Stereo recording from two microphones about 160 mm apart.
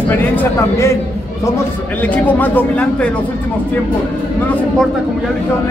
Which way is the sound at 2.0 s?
10° left (ahead or behind).